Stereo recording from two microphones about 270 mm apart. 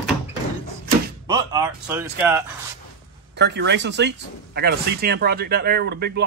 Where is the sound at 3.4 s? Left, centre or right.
Right.